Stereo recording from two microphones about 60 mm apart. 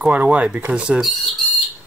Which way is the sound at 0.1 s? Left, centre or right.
Right.